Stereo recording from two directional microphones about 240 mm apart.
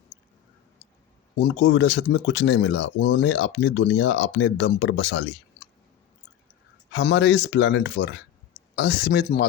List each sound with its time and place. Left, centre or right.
1.4 s speech: left
6.9 s speech: left